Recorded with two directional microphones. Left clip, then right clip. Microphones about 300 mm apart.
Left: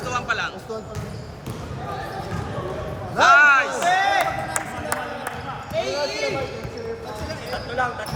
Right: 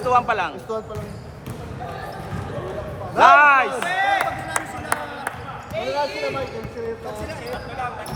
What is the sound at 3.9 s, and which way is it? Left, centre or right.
Speech, left.